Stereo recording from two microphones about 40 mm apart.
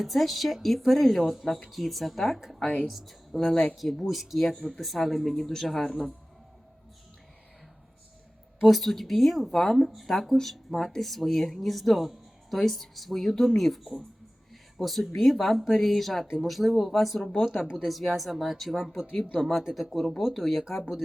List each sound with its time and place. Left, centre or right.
0.0 s speech: centre
3.4 s speech: centre
3.8 s speech: centre
8.6 s speech: centre
16.2 s speech: centre
16.5 s speech: centre